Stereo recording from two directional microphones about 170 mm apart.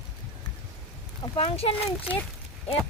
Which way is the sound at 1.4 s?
35° left (ahead or behind).